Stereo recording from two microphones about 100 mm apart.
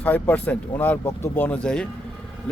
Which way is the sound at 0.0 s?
15° left (ahead or behind).